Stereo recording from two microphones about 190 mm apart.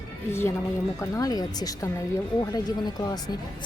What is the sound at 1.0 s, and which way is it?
Speech, 20° left (ahead or behind).